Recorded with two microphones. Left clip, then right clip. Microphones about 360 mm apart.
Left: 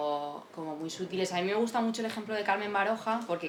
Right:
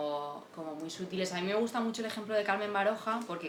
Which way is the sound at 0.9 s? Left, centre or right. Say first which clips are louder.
Left 4 dB; centre.